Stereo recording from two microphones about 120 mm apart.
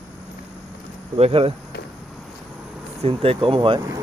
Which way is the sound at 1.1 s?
50° right (ahead or behind).